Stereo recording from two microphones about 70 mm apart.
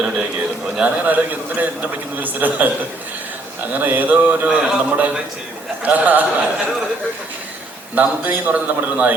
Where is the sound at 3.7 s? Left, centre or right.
Right.